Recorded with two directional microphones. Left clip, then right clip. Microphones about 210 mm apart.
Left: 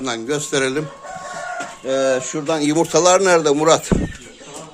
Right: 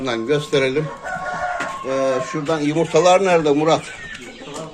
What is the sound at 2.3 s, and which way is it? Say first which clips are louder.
Speech: left 1 dB; 60° left (ahead or behind).